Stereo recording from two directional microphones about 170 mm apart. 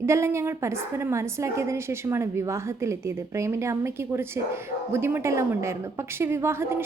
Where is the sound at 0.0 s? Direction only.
15° right (ahead or behind).